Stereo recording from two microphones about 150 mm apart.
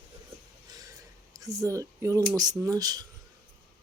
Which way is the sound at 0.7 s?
25° right (ahead or behind).